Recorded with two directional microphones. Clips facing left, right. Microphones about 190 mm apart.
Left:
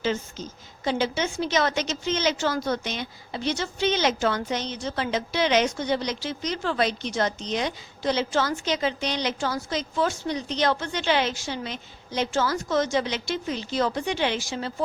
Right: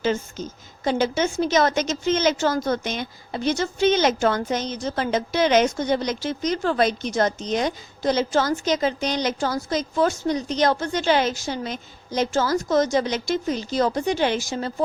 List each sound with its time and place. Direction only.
0.0 s a woman's voice: 50° right (ahead or behind)